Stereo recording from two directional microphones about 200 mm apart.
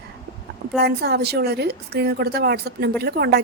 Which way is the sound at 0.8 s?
55° right (ahead or behind).